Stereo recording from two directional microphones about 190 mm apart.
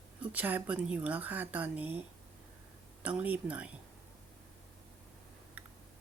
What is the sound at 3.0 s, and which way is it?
Speech, 10° right (ahead or behind).